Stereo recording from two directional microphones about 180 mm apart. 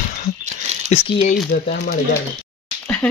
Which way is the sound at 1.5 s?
50° left (ahead or behind).